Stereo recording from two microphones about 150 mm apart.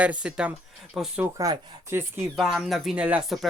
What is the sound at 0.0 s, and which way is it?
Speech, 10° right (ahead or behind).